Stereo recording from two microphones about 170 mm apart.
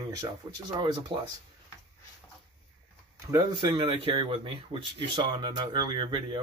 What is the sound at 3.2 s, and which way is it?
Speech, 25° right (ahead or behind).